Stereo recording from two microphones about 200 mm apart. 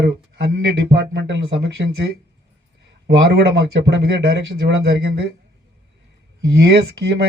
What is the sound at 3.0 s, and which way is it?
A man's voice, 55° right (ahead or behind).